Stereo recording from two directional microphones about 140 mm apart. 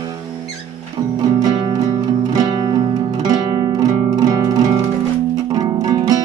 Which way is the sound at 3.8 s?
25° right (ahead or behind).